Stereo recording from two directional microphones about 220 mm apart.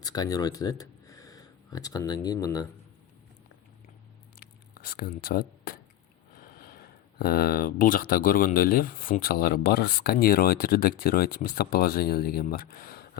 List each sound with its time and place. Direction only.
0.0 s speech: 15° left (ahead or behind)
4.4 s a sound: 45° left (ahead or behind)
6.6 s speech: 40° left (ahead or behind)